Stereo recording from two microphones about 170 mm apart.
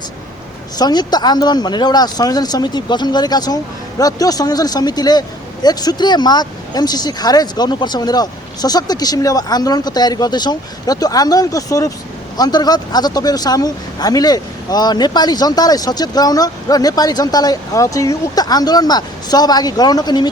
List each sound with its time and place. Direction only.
0.8 s speech: 25° left (ahead or behind)